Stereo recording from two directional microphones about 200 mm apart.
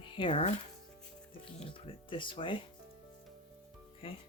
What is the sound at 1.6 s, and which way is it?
Speech, 25° left (ahead or behind).